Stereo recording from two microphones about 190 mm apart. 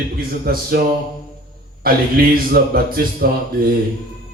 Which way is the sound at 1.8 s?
50° right (ahead or behind).